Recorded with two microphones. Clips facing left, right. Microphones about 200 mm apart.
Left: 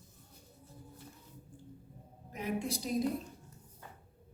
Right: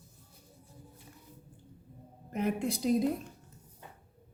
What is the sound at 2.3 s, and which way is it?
Speech, 55° right (ahead or behind).